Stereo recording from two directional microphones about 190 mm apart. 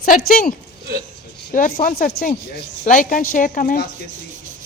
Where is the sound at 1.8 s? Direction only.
50° left (ahead or behind).